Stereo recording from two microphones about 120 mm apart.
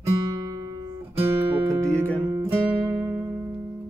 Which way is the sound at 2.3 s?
25° right (ahead or behind).